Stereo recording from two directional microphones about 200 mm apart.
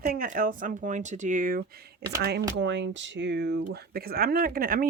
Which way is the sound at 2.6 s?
60° right (ahead or behind).